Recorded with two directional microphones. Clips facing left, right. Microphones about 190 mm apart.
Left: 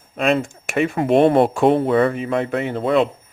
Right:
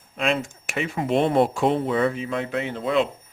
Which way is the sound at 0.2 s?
55° left (ahead or behind).